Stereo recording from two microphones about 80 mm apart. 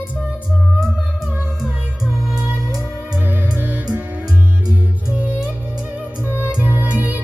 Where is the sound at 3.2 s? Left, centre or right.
Right.